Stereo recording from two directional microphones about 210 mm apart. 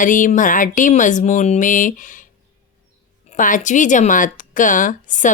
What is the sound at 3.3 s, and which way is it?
Speech, 40° left (ahead or behind).